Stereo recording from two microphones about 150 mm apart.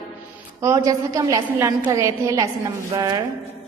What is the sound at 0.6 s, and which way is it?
A woman's voice, 20° right (ahead or behind).